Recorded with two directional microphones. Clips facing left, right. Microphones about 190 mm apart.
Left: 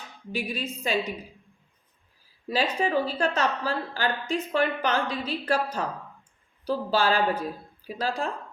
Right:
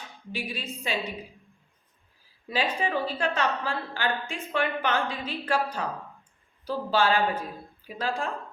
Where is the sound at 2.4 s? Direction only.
40° left (ahead or behind).